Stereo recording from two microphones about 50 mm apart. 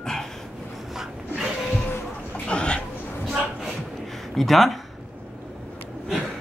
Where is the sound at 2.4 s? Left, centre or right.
Left.